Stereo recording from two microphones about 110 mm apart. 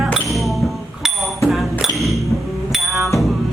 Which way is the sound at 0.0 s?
Centre (ahead or behind).